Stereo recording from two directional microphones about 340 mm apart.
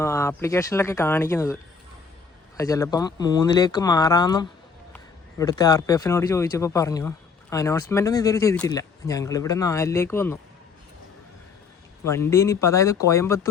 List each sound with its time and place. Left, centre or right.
0.0 s speech: centre
2.6 s speech: centre
12.0 s speech: centre